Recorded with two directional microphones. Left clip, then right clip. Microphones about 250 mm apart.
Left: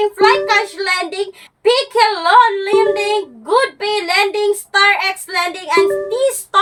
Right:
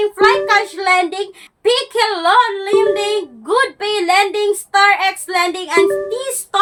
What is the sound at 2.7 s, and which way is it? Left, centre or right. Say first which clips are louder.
Music: even; centre.